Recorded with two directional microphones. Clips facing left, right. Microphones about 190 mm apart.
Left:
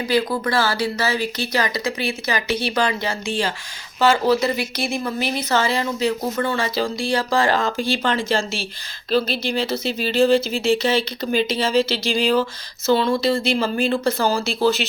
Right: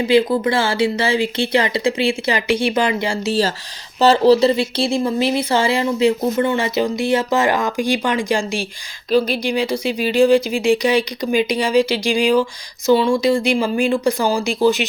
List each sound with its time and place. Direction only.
0.0 s speech: 25° right (ahead or behind)
3.2 s speech: 40° right (ahead or behind); by 14.8 s 15° right (ahead or behind)